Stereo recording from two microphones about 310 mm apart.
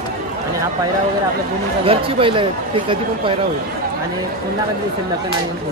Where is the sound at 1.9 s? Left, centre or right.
Centre.